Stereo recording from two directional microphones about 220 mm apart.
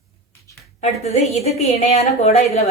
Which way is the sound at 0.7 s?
30° left (ahead or behind).